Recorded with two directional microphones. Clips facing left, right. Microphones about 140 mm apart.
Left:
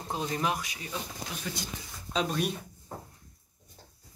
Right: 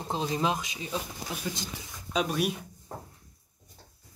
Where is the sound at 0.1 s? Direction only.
20° right (ahead or behind).